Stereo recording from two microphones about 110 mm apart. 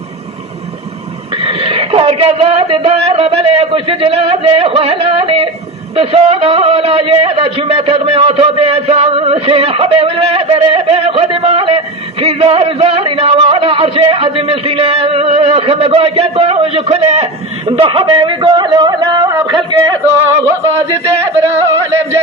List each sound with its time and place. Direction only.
1.4 s a man's voice: 65° right (ahead or behind)
17.7 s a sound: 55° right (ahead or behind); by 19.5 s 35° right (ahead or behind)
21.4 s yodeling: 25° right (ahead or behind)